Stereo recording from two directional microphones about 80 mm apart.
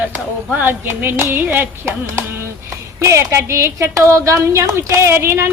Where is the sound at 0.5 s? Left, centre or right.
Right.